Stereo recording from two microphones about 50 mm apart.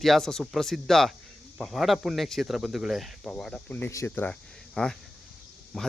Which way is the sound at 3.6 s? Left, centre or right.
Left.